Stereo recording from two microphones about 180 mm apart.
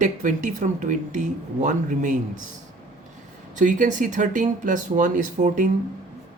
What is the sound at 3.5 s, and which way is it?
Speech, 45° right (ahead or behind).